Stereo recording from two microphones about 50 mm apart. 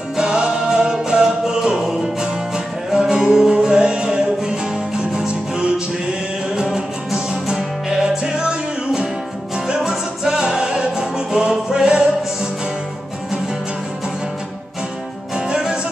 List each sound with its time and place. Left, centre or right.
0.2 s music: centre
15.3 s music: centre